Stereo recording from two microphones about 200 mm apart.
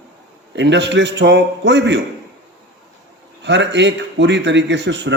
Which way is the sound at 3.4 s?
60° right (ahead or behind).